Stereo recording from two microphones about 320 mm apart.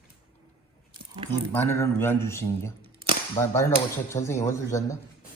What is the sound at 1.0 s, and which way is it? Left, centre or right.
Squish, centre.